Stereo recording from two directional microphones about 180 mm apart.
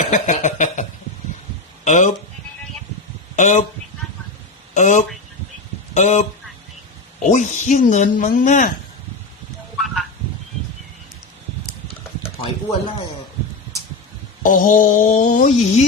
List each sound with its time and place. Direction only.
0.0 s speech: 40° left (ahead or behind)
3.3 s a man's voice: 40° left (ahead or behind)
4.7 s speech: 40° left (ahead or behind)
9.7 s a sound: centre (ahead or behind)
14.4 s speech: 50° left (ahead or behind)